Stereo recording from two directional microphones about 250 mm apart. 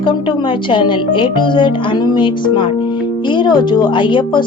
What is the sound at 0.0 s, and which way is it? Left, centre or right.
Music, centre.